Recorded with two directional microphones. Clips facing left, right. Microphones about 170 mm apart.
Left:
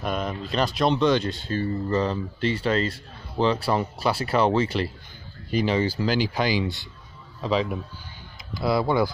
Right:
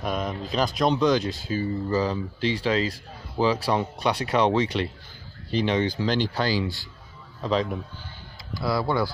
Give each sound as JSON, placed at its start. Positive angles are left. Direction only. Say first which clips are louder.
{"t": 0.0, "sound": "speech", "louder": "even", "side_deg": 0}
{"t": 7.4, "sound": "speech", "louder": "even", "side_deg": 5}
{"t": 8.5, "sound": "speech", "louder": "left 3 dB", "side_deg": 20}